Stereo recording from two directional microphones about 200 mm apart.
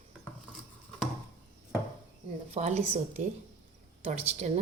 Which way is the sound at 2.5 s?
35° right (ahead or behind).